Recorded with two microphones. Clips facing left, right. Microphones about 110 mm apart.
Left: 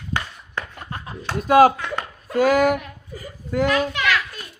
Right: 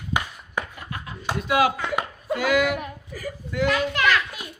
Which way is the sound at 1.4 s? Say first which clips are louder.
Left 8 dB; 45° left (ahead or behind).